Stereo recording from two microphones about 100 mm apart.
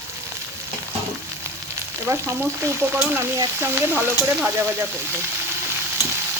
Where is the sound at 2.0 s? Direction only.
25° right (ahead or behind).